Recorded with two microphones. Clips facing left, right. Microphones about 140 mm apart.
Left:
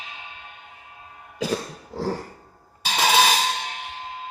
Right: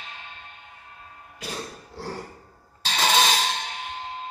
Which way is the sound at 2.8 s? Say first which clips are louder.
Left 3 dB; 10° left (ahead or behind).